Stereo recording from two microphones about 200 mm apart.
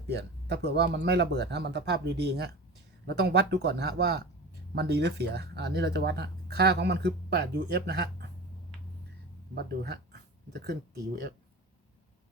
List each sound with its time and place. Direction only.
0.1 s speech: 55° right (ahead or behind)
9.6 s speech: 55° right (ahead or behind)